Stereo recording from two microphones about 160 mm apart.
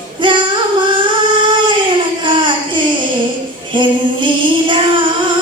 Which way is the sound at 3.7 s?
30° right (ahead or behind).